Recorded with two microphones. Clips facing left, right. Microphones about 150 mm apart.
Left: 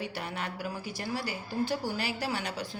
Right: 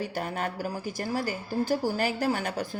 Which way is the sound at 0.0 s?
45° right (ahead or behind).